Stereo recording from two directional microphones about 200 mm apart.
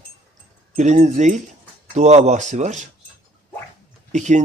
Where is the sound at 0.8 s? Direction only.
35° right (ahead or behind).